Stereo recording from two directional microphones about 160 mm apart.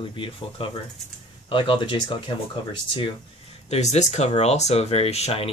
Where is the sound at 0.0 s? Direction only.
35° left (ahead or behind).